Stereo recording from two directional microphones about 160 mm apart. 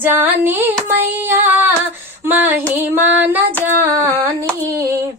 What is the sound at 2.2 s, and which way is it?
Female singing, 10° right (ahead or behind).